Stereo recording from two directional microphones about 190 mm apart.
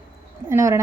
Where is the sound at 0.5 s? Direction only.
15° right (ahead or behind).